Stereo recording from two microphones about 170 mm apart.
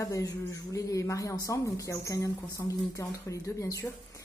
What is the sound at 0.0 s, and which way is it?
Speech, 20° left (ahead or behind).